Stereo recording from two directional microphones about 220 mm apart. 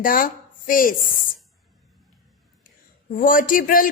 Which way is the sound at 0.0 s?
40° left (ahead or behind).